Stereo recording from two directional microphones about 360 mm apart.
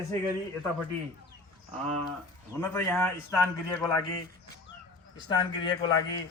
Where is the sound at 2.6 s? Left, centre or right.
Centre.